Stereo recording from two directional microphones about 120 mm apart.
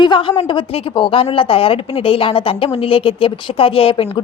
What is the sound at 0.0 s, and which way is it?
A woman's voice, 45° left (ahead or behind).